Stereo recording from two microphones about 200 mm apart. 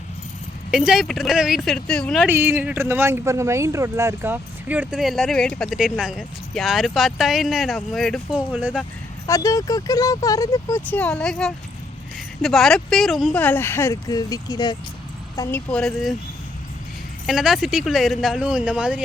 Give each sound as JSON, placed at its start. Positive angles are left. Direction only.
{"t": 0.7, "sound": "speech", "side_deg": 0}
{"t": 2.2, "sound": "speech", "side_deg": -10}
{"t": 9.2, "sound": "speech", "side_deg": 15}
{"t": 15.4, "sound": "speech", "side_deg": 5}
{"t": 17.2, "sound": "speech", "side_deg": 0}